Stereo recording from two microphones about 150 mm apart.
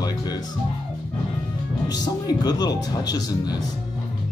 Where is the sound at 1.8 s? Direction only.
25° left (ahead or behind).